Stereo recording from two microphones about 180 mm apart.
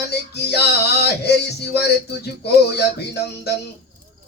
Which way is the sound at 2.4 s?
65° left (ahead or behind).